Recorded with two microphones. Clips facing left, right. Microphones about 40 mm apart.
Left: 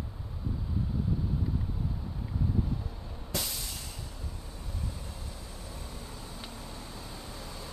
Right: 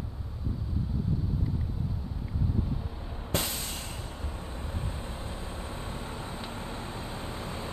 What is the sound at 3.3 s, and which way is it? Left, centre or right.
Music, right.